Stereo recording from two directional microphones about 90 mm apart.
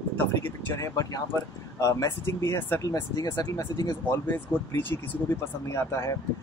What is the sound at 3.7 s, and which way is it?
Speech, 45° left (ahead or behind).